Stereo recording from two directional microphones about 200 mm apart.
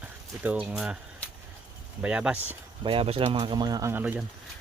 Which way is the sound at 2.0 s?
5° right (ahead or behind).